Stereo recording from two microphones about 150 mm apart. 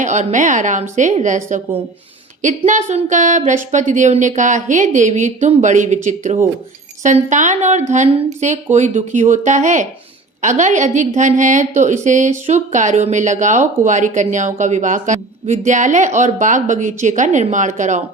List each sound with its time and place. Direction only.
0.0 s speech: 55° right (ahead or behind)
2.4 s a woman's voice: 55° right (ahead or behind)